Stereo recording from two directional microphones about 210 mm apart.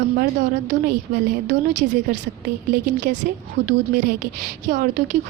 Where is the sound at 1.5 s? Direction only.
55° right (ahead or behind).